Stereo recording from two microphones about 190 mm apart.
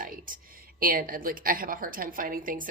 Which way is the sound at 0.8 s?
50° right (ahead or behind).